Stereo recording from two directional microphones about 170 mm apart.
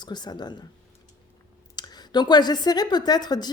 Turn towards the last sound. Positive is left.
turn(degrees=25)  # may be behind; listen again after turning